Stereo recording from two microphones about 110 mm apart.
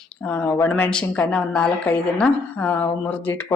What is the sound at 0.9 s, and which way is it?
Speech, 10° left (ahead or behind).